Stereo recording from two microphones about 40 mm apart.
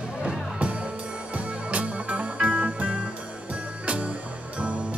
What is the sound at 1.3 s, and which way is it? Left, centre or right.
Music, right.